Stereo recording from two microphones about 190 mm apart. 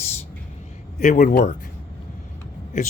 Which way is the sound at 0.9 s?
40° left (ahead or behind).